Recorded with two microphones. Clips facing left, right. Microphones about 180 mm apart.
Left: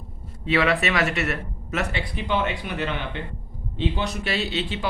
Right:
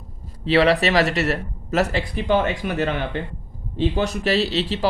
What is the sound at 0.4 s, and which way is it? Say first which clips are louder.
Speech: right 5 dB; 30° right (ahead or behind).